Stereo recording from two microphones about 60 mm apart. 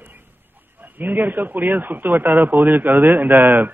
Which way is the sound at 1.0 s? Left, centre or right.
Right.